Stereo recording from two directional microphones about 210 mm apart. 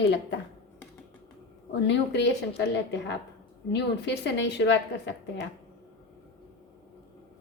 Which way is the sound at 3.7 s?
55° left (ahead or behind).